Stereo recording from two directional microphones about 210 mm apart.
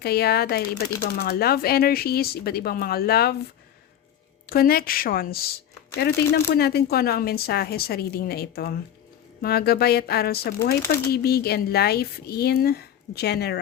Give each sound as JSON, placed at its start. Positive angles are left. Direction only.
{"t": 0.0, "sound": "speech", "side_deg": 50}
{"t": 4.4, "sound": "speech", "side_deg": 45}